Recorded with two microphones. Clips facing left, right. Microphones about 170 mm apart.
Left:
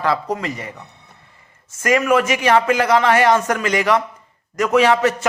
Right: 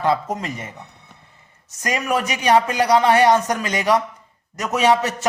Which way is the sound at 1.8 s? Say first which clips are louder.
Left 6 dB; 20° right (ahead or behind).